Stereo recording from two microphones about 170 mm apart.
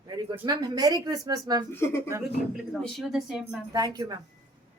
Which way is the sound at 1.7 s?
15° left (ahead or behind).